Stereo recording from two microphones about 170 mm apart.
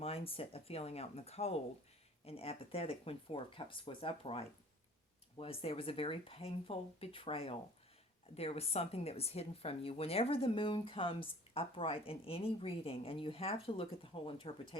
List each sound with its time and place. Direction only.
0.0 s speech: 35° left (ahead or behind)